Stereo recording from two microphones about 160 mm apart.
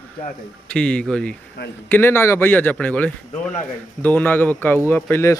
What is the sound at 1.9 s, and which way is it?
A man's voice, 15° left (ahead or behind).